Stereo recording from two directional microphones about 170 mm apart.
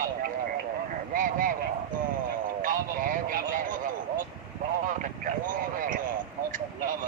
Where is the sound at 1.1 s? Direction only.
55° right (ahead or behind).